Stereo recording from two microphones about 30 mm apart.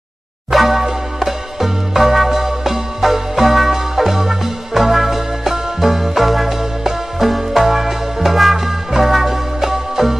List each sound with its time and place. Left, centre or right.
0.5 s music: centre